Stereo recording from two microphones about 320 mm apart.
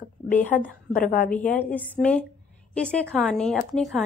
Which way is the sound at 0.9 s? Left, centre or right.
Left.